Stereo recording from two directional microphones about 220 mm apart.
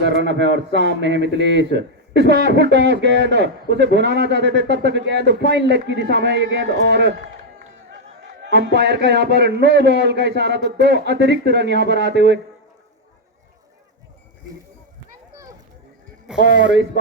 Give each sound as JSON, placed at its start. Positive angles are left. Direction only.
{"t": 0.0, "sound": "speech", "side_deg": -55}
{"t": 8.4, "sound": "speech", "side_deg": -50}
{"t": 16.6, "sound": "speech", "side_deg": -55}